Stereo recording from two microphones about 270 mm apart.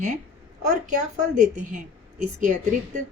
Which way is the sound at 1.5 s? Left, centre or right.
Right.